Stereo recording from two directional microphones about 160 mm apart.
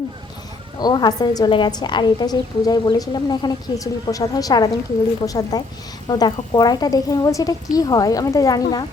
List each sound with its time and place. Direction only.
0.8 s a woman's voice: 25° left (ahead or behind)